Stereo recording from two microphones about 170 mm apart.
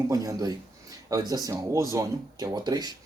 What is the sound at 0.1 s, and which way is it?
Speech, 20° right (ahead or behind).